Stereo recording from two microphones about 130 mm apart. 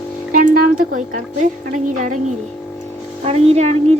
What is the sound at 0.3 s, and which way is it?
Speech, 90° right.